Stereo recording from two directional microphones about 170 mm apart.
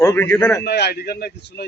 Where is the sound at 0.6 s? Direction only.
75° left (ahead or behind).